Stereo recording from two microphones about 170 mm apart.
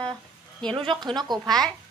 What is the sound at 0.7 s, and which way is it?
Speech, 25° right (ahead or behind).